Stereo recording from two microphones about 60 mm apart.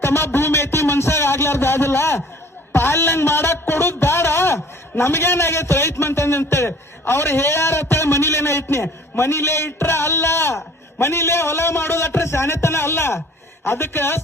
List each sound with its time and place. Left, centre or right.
0.0 s speech: left
0.3 s a sound: left
2.7 s a man's voice: left